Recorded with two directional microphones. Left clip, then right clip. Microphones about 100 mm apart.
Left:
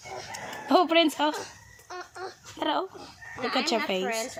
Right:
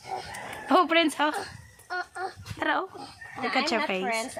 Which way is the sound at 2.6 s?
15° left (ahead or behind).